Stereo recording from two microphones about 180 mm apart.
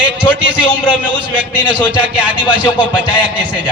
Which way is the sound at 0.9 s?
10° right (ahead or behind).